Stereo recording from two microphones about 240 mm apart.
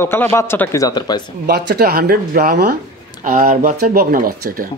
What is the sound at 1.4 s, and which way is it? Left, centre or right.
Speech, right.